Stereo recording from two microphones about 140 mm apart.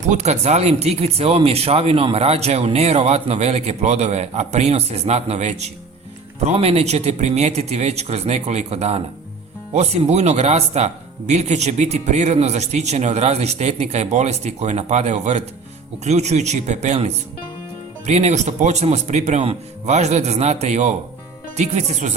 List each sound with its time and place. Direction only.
0.0 s speech: 55° right (ahead or behind)